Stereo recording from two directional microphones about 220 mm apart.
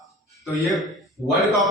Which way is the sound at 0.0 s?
Centre (ahead or behind).